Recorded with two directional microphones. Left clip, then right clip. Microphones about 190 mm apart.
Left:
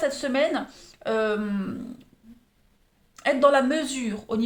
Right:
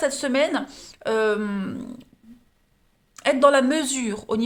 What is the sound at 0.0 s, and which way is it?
Speech, 50° right (ahead or behind).